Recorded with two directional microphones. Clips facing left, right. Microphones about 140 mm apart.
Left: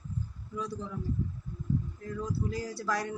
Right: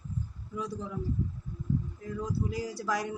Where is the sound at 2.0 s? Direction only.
15° right (ahead or behind).